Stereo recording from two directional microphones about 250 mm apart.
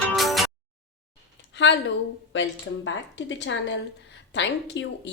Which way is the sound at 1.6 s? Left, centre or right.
Left.